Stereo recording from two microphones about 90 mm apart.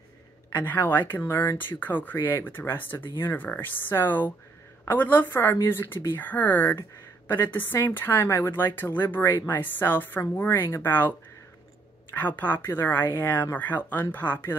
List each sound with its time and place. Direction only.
0.5 s a woman's voice: 20° left (ahead or behind)
12.1 s a woman's voice: 20° left (ahead or behind)